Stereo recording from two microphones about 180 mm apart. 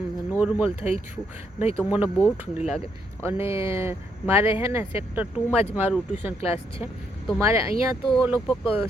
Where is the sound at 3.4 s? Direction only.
15° right (ahead or behind).